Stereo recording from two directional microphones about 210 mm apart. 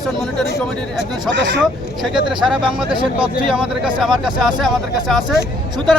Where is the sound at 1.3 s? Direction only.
55° right (ahead or behind).